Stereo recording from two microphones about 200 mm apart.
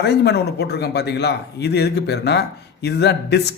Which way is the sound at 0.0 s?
55° left (ahead or behind).